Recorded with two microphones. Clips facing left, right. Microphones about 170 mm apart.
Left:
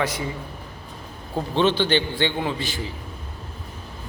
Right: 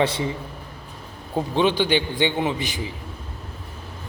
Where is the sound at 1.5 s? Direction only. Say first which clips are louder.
Even; 10° right (ahead or behind).